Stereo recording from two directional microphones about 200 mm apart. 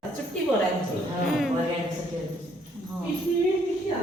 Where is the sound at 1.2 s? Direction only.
Centre (ahead or behind).